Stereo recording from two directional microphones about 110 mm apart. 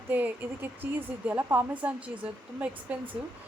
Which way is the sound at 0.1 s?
15° right (ahead or behind).